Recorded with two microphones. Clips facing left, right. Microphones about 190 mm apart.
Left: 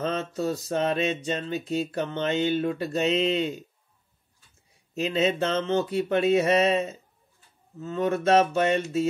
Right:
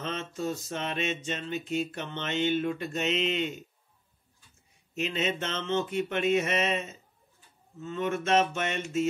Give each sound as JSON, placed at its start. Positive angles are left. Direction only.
{"t": 0.0, "sound": "mantra", "side_deg": 35}
{"t": 4.9, "sound": "mantra", "side_deg": 35}